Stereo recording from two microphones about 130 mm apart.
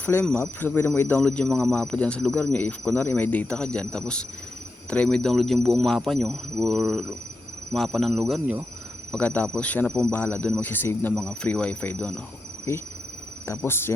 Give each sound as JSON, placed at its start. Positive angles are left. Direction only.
{"t": 0.0, "sound": "speech", "side_deg": 15}
{"t": 9.1, "sound": "speech", "side_deg": 10}
{"t": 12.7, "sound": "speech", "side_deg": 20}